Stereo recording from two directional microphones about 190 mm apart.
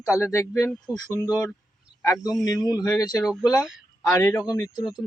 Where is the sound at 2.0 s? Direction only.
15° left (ahead or behind).